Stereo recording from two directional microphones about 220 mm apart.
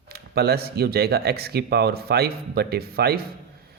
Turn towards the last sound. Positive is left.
turn(degrees=-45)  # may be behind; listen again after turning